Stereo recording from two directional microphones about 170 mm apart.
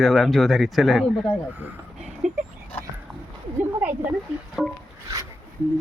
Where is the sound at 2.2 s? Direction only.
45° right (ahead or behind).